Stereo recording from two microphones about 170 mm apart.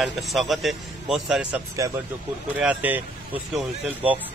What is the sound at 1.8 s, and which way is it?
Speech, 20° right (ahead or behind).